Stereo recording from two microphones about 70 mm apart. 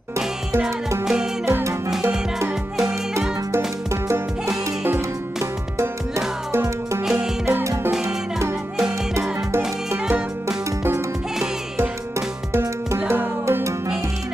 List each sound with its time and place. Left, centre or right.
3.2 s music: right
5.8 s music: right
13.1 s music: right